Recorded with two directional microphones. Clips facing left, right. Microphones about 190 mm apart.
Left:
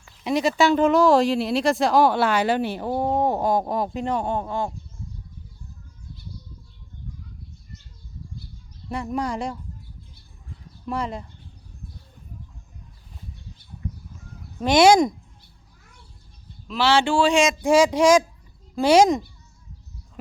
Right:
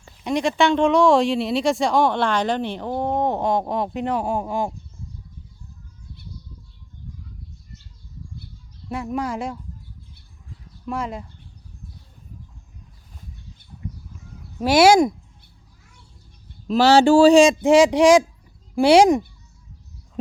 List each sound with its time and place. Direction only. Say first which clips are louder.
0.3 s speech: even; 5° left (ahead or behind); by 4.7 s 15° right (ahead or behind)
8.9 s speech: right 1 dB; centre (ahead or behind)
10.8 s speech: even; centre (ahead or behind)
14.6 s a sound: right 1 dB; 5° right (ahead or behind)
16.6 s a man's voice: right 6 dB; 40° right (ahead or behind)
17.6 s a sound: right 3 dB; 15° right (ahead or behind)